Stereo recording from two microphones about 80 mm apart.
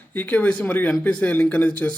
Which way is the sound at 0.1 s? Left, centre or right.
Left.